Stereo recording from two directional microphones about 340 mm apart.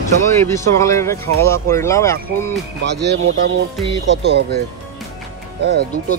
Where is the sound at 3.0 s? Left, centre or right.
Right.